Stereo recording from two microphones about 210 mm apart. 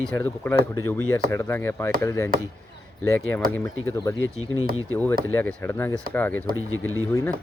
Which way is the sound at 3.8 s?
15° left (ahead or behind).